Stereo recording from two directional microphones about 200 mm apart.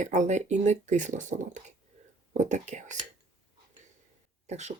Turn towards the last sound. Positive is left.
turn(degrees=-35)  # may be behind; listen again after turning